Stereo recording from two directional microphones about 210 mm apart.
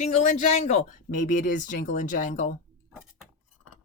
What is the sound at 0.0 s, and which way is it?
Speech, 35° left (ahead or behind).